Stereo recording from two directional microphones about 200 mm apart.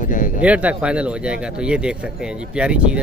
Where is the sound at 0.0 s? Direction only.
40° left (ahead or behind).